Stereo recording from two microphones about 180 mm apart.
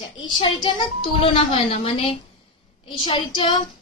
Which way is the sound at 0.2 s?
25° left (ahead or behind).